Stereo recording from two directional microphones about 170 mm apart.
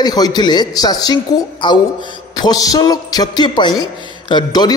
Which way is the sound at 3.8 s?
25° left (ahead or behind).